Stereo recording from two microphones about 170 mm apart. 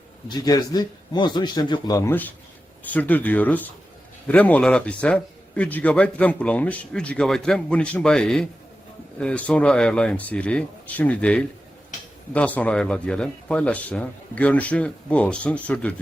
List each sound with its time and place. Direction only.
0.3 s a man's voice: 25° left (ahead or behind); by 16.0 s 10° left (ahead or behind)